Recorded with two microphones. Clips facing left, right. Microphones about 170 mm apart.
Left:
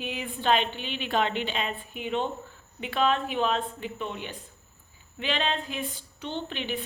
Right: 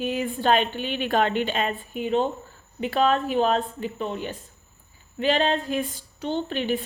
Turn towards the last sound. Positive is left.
turn(degrees=-45)  # may be behind; listen again after turning